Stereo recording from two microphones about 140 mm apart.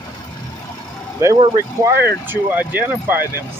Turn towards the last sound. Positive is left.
turn(degrees=-10)  # may be behind; listen again after turning